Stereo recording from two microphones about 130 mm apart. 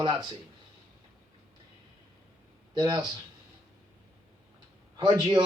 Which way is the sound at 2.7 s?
30° right (ahead or behind).